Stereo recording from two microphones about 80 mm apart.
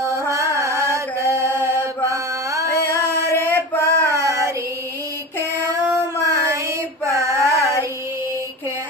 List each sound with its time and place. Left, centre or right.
0.0 s carnatic music: right
0.6 s mantra: right
3.3 s male singing: left
4.1 s child singing: right
6.2 s child singing: right
7.1 s a sound: right